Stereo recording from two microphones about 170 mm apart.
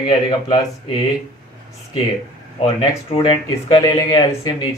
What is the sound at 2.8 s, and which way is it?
Speech, 30° left (ahead or behind).